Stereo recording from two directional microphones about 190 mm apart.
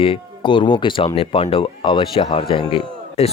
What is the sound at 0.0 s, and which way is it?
Speech, 25° left (ahead or behind).